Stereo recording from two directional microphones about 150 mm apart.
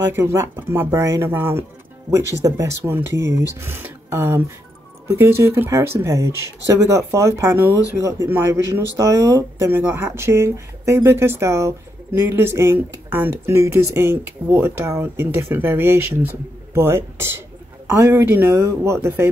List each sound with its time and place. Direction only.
0.1 s speech: 20° right (ahead or behind)